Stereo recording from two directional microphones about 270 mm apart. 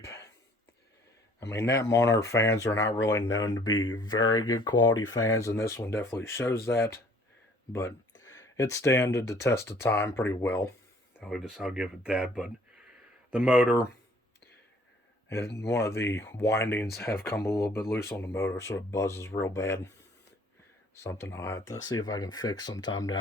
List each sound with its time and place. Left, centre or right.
0.0 s a sound: centre
1.5 s speech: centre
3.7 s speech: left
3.9 s speech: centre
15.3 s speech: centre
20.9 s speech: centre